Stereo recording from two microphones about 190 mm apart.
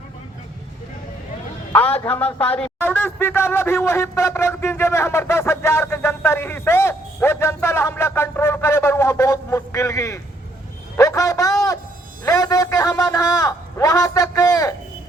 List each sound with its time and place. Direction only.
1.7 s speech: 10° left (ahead or behind)